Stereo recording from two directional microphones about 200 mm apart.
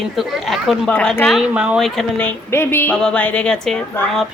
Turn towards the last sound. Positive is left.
turn(degrees=0)  # may be behind; listen again after turning